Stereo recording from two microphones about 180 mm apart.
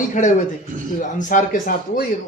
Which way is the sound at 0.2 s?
40° left (ahead or behind).